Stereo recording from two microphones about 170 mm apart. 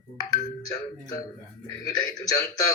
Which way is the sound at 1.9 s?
20° left (ahead or behind).